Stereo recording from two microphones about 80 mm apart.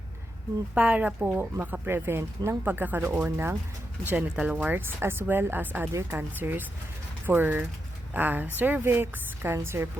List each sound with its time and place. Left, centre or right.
0.7 s speech: centre
1.3 s speech: right
2.6 s a woman's voice: right